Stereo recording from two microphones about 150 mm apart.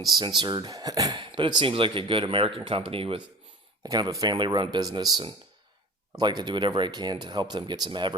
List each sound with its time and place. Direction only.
0.1 s speech: 25° right (ahead or behind)
3.8 s speech: 25° right (ahead or behind)